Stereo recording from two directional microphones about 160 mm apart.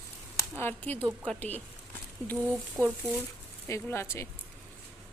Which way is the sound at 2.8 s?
15° right (ahead or behind).